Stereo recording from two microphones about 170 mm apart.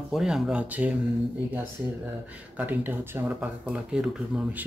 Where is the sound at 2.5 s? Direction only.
10° right (ahead or behind).